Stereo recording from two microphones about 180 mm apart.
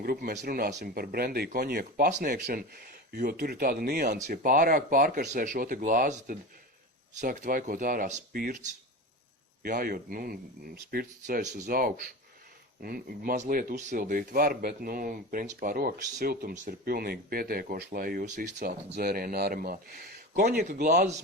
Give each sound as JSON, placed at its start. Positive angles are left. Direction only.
{"t": 0.0, "sound": "speech", "side_deg": -55}
{"t": 9.6, "sound": "speech", "side_deg": -50}
{"t": 20.3, "sound": "speech", "side_deg": -45}